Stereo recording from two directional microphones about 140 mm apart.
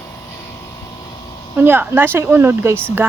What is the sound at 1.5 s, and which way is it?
A woman's voice, 15° right (ahead or behind).